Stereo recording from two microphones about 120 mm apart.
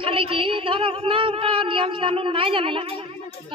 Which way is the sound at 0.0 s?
45° right (ahead or behind).